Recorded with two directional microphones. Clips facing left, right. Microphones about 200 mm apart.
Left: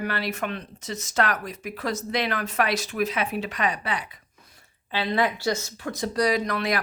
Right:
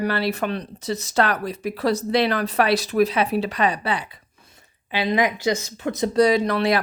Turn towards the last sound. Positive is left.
turn(degrees=-30)  # may be behind; listen again after turning